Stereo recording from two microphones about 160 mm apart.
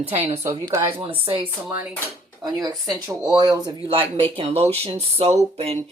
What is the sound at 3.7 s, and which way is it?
A woman's voice, 35° right (ahead or behind).